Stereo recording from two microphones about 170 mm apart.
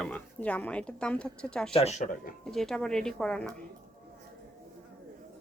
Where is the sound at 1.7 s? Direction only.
40° left (ahead or behind).